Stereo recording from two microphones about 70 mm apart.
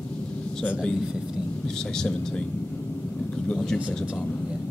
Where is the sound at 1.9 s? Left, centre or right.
Centre.